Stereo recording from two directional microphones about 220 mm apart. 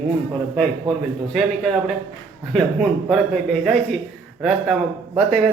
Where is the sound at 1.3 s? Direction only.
Centre (ahead or behind).